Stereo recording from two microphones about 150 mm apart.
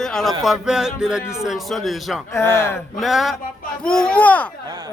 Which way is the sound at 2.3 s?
15° left (ahead or behind).